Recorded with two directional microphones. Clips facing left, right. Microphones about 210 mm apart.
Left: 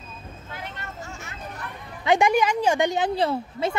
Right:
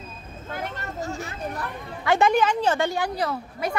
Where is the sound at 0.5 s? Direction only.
45° right (ahead or behind).